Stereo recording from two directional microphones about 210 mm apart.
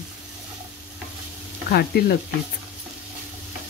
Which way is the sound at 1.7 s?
45° left (ahead or behind).